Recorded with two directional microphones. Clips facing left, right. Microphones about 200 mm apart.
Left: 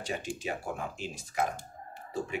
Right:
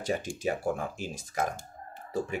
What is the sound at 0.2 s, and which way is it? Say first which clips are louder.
Speech: right 5 dB; 45° right (ahead or behind).